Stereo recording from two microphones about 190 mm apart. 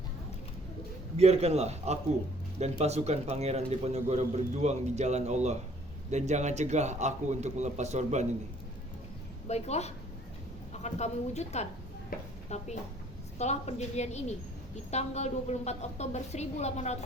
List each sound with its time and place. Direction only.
1.1 s a man's voice: 35° right (ahead or behind)
9.5 s a woman's voice: 35° left (ahead or behind)
12.1 s speech: 50° left (ahead or behind)
12.5 s a woman's voice: 35° left (ahead or behind)